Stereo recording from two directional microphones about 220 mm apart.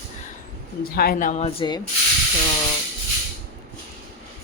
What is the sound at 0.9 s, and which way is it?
Speech, 40° left (ahead or behind).